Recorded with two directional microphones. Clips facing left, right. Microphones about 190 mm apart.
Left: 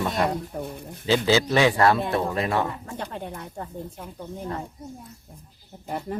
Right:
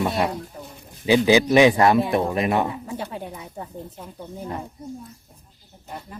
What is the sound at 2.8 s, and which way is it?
Speech, 5° right (ahead or behind).